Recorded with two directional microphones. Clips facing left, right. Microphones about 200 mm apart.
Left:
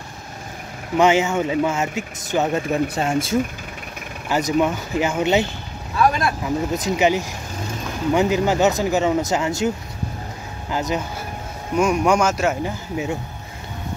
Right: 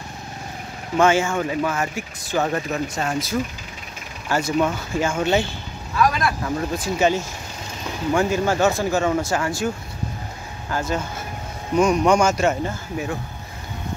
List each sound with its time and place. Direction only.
0.9 s speech: 20° left (ahead or behind)
10.7 s speech: 15° left (ahead or behind)
12.9 s speech: 20° left (ahead or behind)